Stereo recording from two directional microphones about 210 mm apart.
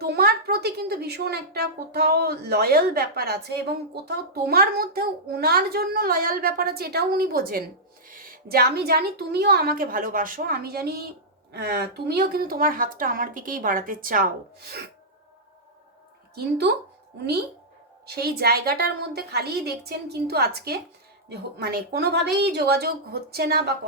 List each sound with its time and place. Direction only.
0.0 s a woman's voice: 50° right (ahead or behind)
16.3 s a woman's voice: 50° right (ahead or behind)
18.0 s a woman's voice: 50° right (ahead or behind)